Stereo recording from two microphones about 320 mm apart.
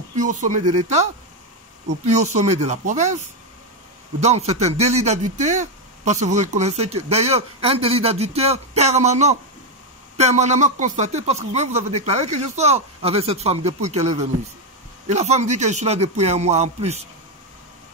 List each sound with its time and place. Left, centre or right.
0.1 s speech: right
2.0 s speech: right